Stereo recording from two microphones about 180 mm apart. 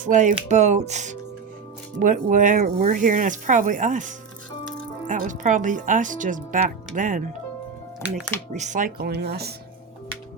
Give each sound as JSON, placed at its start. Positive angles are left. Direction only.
{"t": 0.0, "sound": "speech", "side_deg": -45}
{"t": 8.5, "sound": "speech", "side_deg": -40}